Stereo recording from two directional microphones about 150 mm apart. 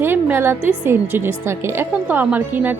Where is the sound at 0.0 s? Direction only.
15° right (ahead or behind).